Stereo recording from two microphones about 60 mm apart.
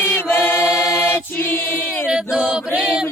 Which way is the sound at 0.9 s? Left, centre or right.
Left.